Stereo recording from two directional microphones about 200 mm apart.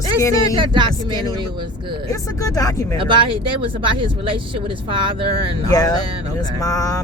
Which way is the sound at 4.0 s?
25° right (ahead or behind).